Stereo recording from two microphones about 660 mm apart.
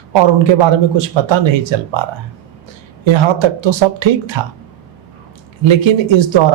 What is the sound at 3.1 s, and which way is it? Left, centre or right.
Speech, right.